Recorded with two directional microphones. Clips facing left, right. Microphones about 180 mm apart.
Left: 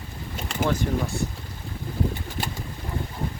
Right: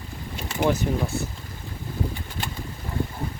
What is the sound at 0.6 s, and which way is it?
Speech, 10° right (ahead or behind).